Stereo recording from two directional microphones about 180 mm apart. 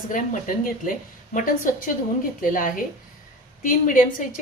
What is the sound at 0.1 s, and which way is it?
A woman's voice, 50° left (ahead or behind).